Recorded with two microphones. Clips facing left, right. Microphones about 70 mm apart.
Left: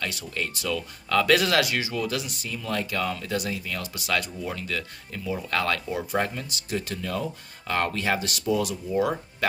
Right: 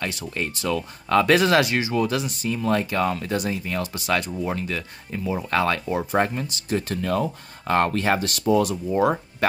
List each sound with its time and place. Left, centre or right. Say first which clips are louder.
0.0 s speech: right 3 dB; right
8.9 s speech: right 4 dB; right